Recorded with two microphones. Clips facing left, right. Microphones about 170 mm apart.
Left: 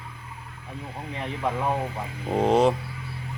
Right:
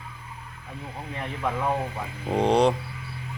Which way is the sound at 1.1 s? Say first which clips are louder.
Left 1 dB; 20° left (ahead or behind).